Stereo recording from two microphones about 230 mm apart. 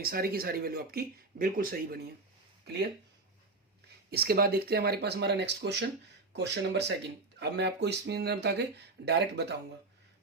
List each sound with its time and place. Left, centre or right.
0.0 s speech: right
4.1 s speech: right